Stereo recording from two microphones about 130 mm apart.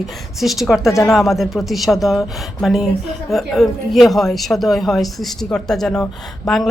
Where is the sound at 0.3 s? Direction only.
Centre (ahead or behind).